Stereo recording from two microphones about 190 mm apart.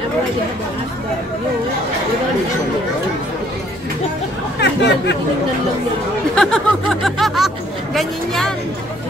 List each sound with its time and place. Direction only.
4.6 s chatter: 65° left (ahead or behind)
6.3 s speech: 5° left (ahead or behind)